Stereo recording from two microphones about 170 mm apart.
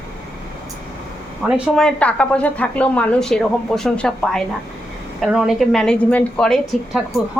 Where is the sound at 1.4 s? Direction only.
5° left (ahead or behind).